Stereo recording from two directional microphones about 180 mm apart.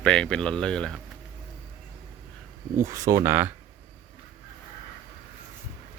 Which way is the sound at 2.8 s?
15° right (ahead or behind).